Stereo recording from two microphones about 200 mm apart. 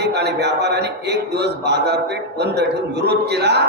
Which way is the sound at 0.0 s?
55° right (ahead or behind).